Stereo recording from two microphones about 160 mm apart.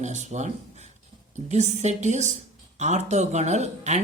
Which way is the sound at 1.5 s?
45° right (ahead or behind).